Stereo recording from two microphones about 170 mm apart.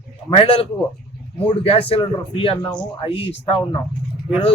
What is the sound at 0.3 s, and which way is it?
Speech, 35° left (ahead or behind).